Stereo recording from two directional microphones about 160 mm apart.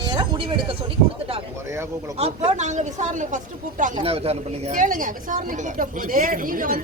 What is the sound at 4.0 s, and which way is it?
Speech, 40° right (ahead or behind).